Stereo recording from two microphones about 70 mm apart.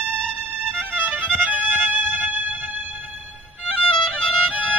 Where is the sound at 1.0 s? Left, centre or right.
Right.